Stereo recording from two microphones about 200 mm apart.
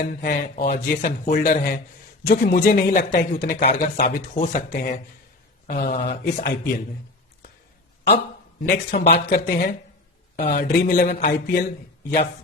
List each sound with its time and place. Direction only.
0.0 s speech: 45° left (ahead or behind)
8.6 s speech: 55° left (ahead or behind)